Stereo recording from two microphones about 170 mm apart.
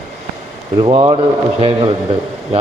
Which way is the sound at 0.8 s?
30° right (ahead or behind).